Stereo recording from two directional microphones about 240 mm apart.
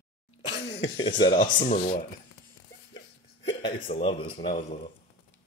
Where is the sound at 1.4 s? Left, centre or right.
Left.